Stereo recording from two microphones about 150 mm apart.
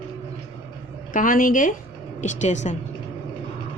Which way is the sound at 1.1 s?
65° left (ahead or behind).